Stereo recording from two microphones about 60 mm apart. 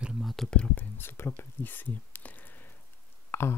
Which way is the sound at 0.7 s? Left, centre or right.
Left.